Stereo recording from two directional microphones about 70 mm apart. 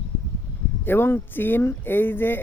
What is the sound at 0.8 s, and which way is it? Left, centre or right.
Speech, left.